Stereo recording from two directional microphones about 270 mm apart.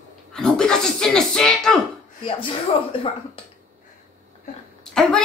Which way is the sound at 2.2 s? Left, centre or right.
Centre.